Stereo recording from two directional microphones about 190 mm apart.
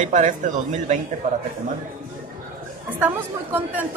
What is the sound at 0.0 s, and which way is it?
Speech, 40° right (ahead or behind).